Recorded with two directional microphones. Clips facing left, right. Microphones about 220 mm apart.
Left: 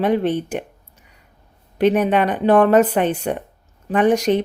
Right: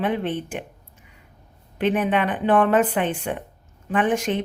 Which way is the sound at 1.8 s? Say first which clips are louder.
Left 5 dB; 40° left (ahead or behind).